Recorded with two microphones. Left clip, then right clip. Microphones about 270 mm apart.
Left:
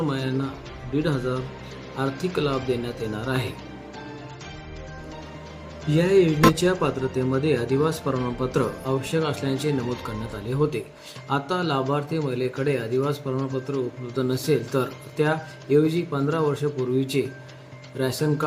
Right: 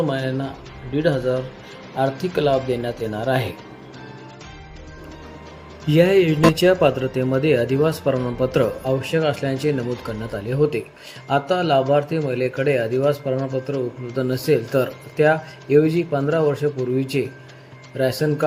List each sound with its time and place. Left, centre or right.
0.1 s a man's voice: centre
5.9 s a man's voice: centre